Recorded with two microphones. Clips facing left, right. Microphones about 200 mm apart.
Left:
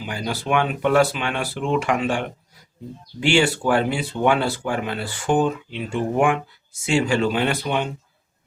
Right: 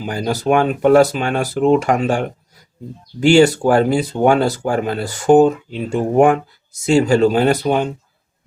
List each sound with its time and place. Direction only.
0.0 s speech: 40° right (ahead or behind)